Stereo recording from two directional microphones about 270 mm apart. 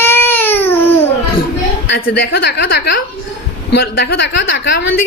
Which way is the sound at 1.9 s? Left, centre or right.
Left.